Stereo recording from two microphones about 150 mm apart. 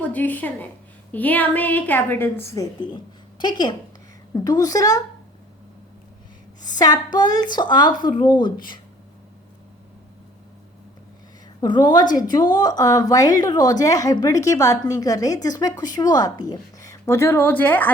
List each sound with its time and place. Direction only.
0.0 s a woman's voice: 10° left (ahead or behind)
6.7 s a woman's voice: 25° left (ahead or behind)
11.6 s a woman's voice: 30° left (ahead or behind); by 17.9 s 10° left (ahead or behind)